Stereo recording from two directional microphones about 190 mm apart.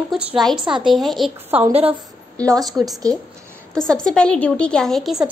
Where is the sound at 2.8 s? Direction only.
5° right (ahead or behind).